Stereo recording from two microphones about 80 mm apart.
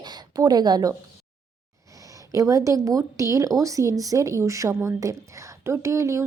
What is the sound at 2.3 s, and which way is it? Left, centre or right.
A woman's voice, right.